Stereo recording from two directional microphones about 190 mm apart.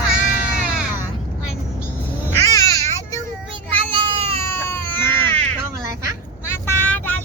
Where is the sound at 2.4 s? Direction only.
15° left (ahead or behind).